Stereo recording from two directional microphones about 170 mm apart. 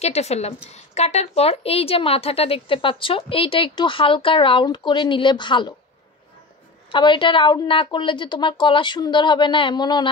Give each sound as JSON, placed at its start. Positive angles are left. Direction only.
{"t": 0.0, "sound": "a woman's voice", "side_deg": 40}
{"t": 6.9, "sound": "a woman's voice", "side_deg": 30}